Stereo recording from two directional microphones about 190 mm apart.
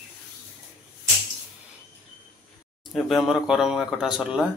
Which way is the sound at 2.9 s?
Centre (ahead or behind).